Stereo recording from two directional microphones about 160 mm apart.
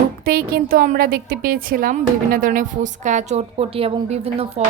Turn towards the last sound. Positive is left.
turn(degrees=-40)  # may be behind; listen again after turning